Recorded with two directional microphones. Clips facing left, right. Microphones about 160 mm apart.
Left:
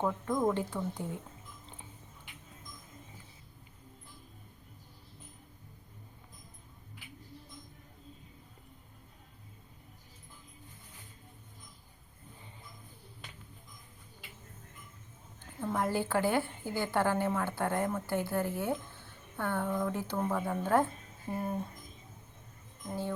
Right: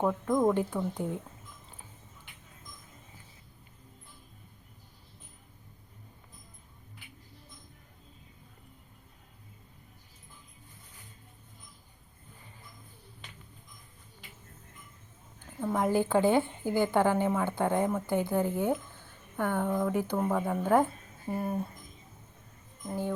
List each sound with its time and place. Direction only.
0.0 s a woman's voice: 5° right (ahead or behind)
15.6 s a woman's voice: 15° right (ahead or behind)